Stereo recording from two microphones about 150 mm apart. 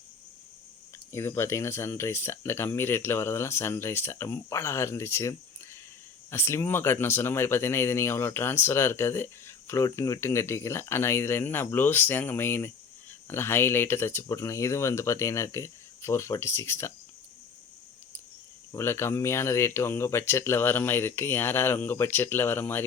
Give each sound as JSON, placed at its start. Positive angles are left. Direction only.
{"t": 0.9, "sound": "speech", "side_deg": 20}
{"t": 6.3, "sound": "speech", "side_deg": 15}
{"t": 18.7, "sound": "speech", "side_deg": 15}